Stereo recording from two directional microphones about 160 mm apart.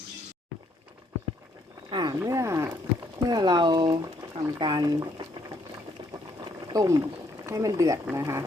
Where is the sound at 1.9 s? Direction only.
25° right (ahead or behind).